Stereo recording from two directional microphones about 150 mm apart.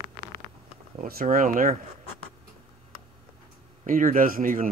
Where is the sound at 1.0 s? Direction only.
70° right (ahead or behind).